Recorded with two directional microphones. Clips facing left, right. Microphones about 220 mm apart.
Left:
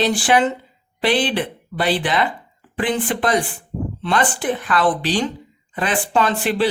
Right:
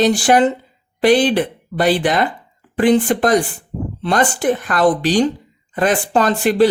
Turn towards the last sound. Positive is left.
turn(degrees=-45)  # may be behind; listen again after turning